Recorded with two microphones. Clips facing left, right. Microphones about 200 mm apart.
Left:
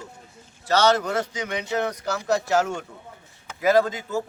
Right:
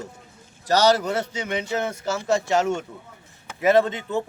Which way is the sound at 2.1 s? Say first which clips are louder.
Right 2 dB; centre (ahead or behind).